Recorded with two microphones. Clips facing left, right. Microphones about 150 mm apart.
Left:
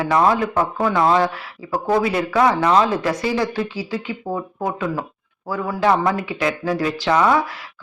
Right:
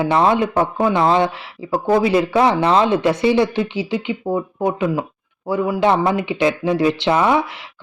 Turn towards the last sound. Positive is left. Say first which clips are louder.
# right 1 dB
turn(degrees=-25)  # may be behind; listen again after turning